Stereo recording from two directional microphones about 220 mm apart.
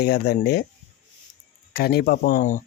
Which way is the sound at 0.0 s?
50° left (ahead or behind).